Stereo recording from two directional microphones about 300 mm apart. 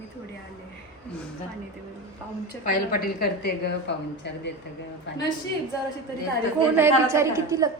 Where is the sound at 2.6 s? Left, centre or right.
Left.